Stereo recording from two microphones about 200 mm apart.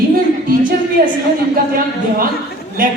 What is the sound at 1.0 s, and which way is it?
Speech, 45° right (ahead or behind).